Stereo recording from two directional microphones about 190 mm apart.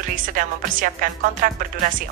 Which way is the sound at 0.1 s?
45° right (ahead or behind).